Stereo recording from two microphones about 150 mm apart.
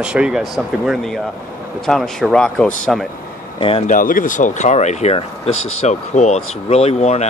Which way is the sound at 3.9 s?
65° left (ahead or behind).